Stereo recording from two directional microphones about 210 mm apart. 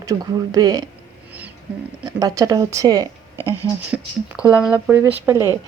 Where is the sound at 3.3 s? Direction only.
15° left (ahead or behind).